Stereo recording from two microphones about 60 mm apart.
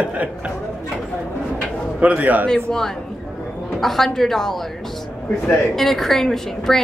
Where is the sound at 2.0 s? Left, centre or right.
Right.